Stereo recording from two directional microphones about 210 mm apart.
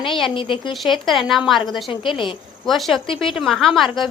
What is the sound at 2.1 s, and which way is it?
Speech, 25° left (ahead or behind).